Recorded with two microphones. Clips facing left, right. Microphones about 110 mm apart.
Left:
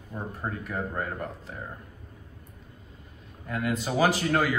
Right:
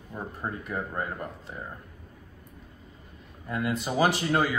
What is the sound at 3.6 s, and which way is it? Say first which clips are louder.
Speech: even; 20° right (ahead or behind).